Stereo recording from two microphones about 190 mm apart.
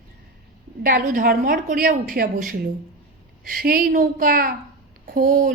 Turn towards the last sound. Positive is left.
turn(degrees=-45)  # may be behind; listen again after turning